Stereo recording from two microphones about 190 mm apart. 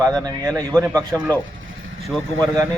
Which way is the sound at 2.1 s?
Centre (ahead or behind).